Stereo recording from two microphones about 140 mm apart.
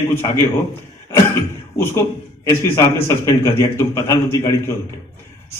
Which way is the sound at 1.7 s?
20° left (ahead or behind).